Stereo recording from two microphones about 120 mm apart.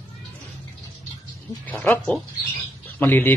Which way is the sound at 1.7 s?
15° left (ahead or behind).